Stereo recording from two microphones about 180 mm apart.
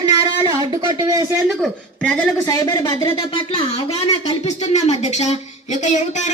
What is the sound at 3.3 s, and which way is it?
Speech, 30° left (ahead or behind).